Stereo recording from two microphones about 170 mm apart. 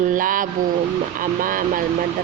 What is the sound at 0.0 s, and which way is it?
Vehicle, 50° right (ahead or behind).